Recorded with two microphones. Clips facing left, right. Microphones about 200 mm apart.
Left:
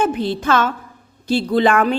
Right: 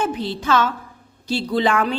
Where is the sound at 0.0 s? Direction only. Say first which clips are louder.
Left 4 dB; 55° left (ahead or behind).